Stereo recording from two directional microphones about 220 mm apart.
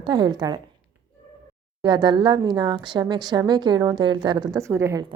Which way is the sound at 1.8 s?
20° right (ahead or behind).